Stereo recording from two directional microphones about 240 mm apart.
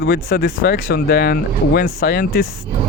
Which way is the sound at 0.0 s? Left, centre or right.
Left.